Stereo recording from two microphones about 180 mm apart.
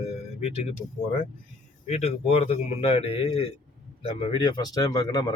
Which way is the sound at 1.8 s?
35° left (ahead or behind).